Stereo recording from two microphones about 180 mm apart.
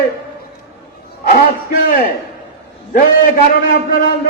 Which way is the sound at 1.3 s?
50° left (ahead or behind).